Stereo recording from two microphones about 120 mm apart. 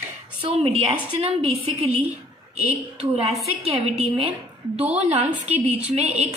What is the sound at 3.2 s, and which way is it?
A woman's voice, 55° right (ahead or behind).